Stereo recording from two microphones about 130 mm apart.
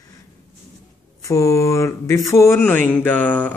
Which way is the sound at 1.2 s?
25° left (ahead or behind).